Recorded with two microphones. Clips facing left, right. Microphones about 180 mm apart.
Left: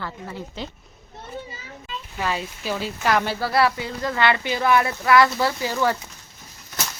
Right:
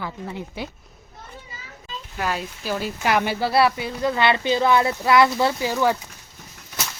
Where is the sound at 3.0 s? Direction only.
10° right (ahead or behind).